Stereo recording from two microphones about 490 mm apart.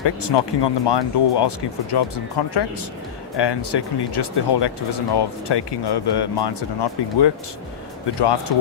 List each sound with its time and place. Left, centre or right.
0.0 s speech: left